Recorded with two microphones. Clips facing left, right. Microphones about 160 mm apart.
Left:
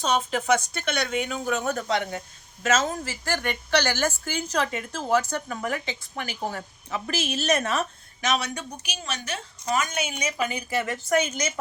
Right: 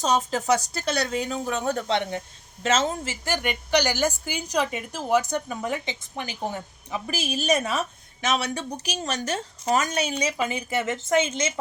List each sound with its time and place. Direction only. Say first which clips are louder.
0.0 s a woman's voice: right 1 dB; 40° right (ahead or behind); by 7.9 s 10° right (ahead or behind)
8.2 s a woman's voice: right 1 dB; 30° right (ahead or behind)